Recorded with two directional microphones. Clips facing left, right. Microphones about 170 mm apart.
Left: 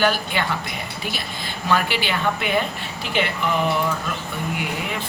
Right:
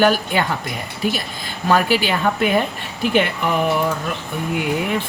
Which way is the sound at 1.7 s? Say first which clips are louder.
Right 5 dB; 40° right (ahead or behind).